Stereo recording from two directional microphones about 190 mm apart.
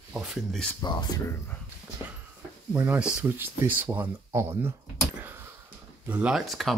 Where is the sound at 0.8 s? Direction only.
25° left (ahead or behind).